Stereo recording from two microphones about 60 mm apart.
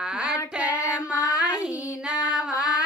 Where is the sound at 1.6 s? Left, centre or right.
Centre.